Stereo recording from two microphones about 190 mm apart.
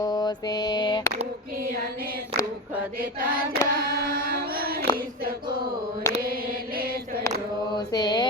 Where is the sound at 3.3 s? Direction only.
50° right (ahead or behind).